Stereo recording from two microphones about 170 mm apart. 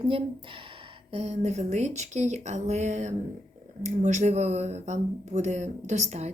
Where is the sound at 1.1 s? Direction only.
40° right (ahead or behind).